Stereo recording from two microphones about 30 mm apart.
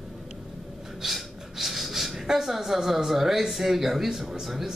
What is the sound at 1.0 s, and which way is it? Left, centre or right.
Speech, centre.